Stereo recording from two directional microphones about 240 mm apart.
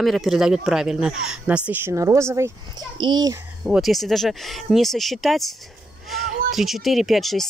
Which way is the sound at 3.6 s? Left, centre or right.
Centre.